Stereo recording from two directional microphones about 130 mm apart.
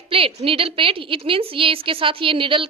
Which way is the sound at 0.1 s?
45° right (ahead or behind).